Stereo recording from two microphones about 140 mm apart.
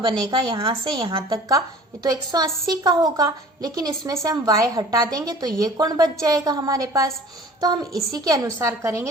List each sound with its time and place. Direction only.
0.0 s speech: 35° right (ahead or behind)
1.3 s a woman's voice: 25° right (ahead or behind)